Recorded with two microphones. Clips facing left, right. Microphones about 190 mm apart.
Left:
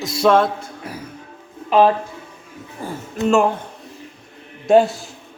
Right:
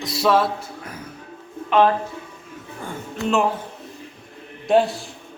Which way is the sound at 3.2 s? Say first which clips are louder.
Left 5 dB; centre (ahead or behind).